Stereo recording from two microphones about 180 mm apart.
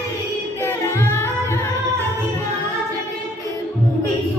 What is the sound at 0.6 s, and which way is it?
Music, 15° left (ahead or behind).